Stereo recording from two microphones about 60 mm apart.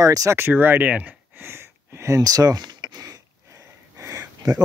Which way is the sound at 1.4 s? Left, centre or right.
Right.